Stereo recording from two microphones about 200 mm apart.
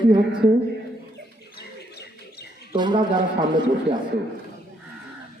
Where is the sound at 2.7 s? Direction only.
20° right (ahead or behind).